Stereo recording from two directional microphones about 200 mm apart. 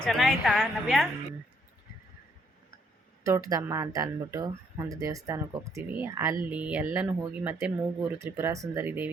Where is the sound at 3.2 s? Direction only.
15° right (ahead or behind).